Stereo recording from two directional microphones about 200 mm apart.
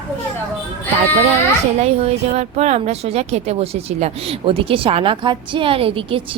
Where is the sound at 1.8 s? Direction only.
30° right (ahead or behind).